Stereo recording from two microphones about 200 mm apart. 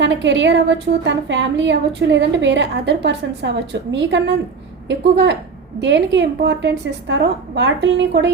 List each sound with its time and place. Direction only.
0.0 s a woman's voice: 65° right (ahead or behind)